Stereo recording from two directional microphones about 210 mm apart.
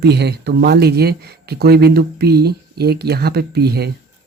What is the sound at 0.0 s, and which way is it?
Speech, 50° right (ahead or behind).